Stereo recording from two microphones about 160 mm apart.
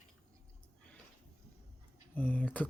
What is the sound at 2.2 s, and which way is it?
Speech, 10° left (ahead or behind).